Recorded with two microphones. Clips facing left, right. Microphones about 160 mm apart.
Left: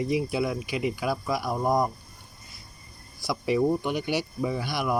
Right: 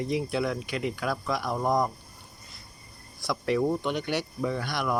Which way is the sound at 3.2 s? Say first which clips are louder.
Left 2 dB; 10° left (ahead or behind).